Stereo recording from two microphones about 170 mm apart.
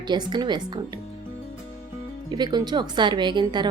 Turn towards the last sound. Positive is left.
turn(degrees=-25)  # may be behind; listen again after turning